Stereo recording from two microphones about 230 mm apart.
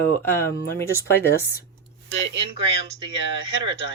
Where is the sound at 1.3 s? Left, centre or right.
Left.